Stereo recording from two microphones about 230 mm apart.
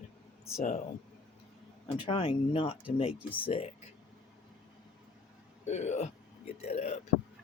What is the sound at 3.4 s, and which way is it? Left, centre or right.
Speech, left.